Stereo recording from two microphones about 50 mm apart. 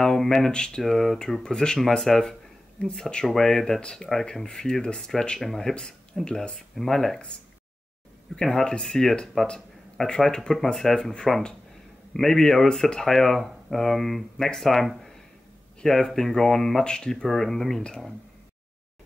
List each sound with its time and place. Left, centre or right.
0.0 s speech: centre
0.5 s speech: centre
0.8 s speech: centre
1.8 s speech: centre
6.7 s speech: centre
8.4 s speech: centre